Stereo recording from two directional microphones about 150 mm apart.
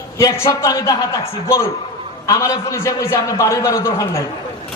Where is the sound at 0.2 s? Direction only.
20° left (ahead or behind).